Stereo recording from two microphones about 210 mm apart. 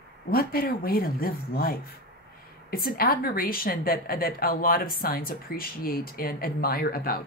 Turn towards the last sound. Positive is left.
turn(degrees=45)  # may be behind; listen again after turning